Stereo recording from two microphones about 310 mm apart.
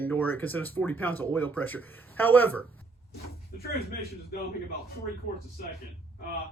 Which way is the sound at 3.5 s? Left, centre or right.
Left.